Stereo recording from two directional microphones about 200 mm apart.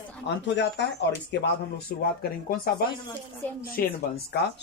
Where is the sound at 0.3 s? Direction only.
60° left (ahead or behind).